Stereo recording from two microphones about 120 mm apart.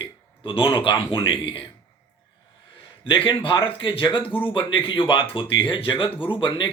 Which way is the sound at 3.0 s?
45° left (ahead or behind).